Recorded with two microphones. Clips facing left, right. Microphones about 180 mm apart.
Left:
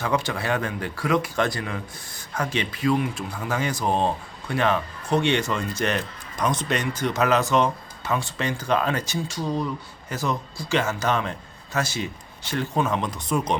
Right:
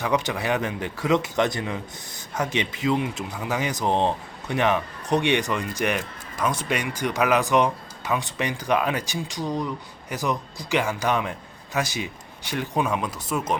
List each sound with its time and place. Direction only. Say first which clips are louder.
0.0 s a man's voice: right 1 dB; 20° right (ahead or behind)